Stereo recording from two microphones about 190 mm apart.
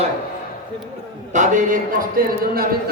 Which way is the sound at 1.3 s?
40° right (ahead or behind).